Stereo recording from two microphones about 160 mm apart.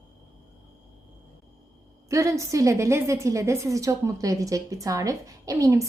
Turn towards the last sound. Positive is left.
turn(degrees=-20)  # may be behind; listen again after turning